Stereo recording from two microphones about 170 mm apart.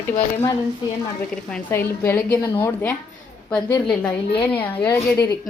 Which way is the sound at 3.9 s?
5° left (ahead or behind).